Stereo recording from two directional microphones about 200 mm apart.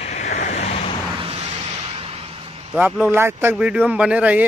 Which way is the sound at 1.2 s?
30° right (ahead or behind).